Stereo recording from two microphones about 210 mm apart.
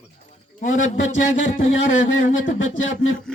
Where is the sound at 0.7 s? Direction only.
65° left (ahead or behind).